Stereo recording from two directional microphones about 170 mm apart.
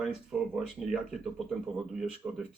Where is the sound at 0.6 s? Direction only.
5° right (ahead or behind).